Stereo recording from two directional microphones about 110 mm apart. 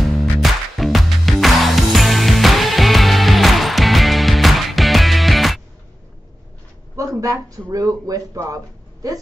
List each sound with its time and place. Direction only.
0.0 s music: centre (ahead or behind)
7.0 s speech: 30° right (ahead or behind)